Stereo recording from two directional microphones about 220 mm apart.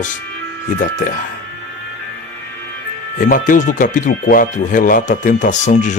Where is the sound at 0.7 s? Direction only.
35° left (ahead or behind).